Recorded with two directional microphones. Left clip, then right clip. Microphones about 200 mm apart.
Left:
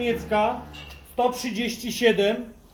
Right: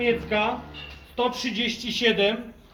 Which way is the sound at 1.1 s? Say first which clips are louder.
Left 1 dB; 35° left (ahead or behind).